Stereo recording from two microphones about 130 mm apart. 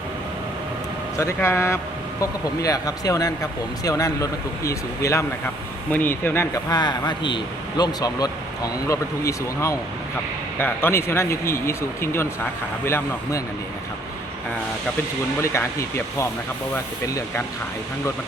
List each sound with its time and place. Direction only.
1.1 s speech: 20° left (ahead or behind)
6.7 s a man's voice: 35° left (ahead or behind)
15.4 s speech: 20° left (ahead or behind)